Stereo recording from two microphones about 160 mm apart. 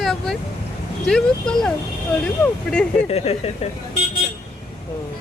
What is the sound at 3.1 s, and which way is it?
Speech, 40° left (ahead or behind).